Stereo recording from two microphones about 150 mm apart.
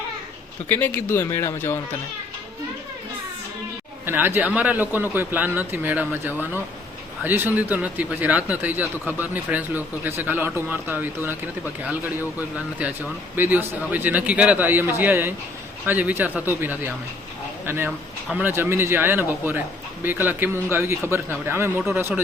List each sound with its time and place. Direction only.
0.7 s speech: 10° left (ahead or behind)
4.0 s speech: 15° right (ahead or behind)
18.3 s speech: 5° right (ahead or behind)
18.5 s speech: 15° right (ahead or behind)